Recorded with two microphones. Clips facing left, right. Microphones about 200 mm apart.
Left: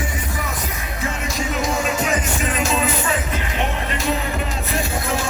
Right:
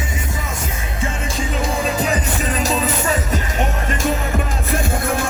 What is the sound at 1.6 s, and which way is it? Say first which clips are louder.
Music: right 2 dB; 35° right (ahead or behind).